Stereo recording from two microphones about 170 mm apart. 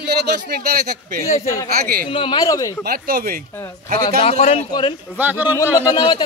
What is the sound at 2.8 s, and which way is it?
Speech, 60° right (ahead or behind).